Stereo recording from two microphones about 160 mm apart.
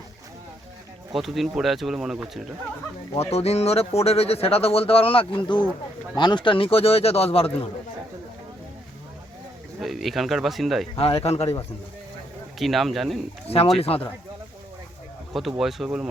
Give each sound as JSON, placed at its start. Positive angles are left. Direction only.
{"t": 1.1, "sound": "speech", "side_deg": 0}
{"t": 3.2, "sound": "speech", "side_deg": 40}
{"t": 9.8, "sound": "speech", "side_deg": 0}
{"t": 10.9, "sound": "speech", "side_deg": 40}
{"t": 12.5, "sound": "speech", "side_deg": 0}
{"t": 13.7, "sound": "speech", "side_deg": 40}
{"t": 15.3, "sound": "speech", "side_deg": 0}